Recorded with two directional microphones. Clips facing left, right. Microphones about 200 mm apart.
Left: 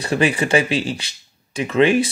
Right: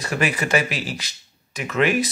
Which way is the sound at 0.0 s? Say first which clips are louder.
Left 5 dB; 30° left (ahead or behind).